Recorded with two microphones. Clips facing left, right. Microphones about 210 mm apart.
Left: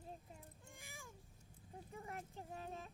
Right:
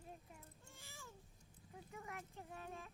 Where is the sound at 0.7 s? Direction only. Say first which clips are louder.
Left 1 dB; 15° left (ahead or behind).